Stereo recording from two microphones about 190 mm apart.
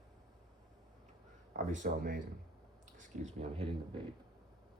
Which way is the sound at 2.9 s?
35° right (ahead or behind).